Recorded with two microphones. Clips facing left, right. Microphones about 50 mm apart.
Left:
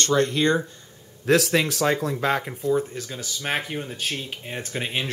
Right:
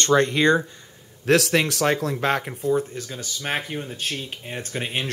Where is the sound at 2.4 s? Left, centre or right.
Centre.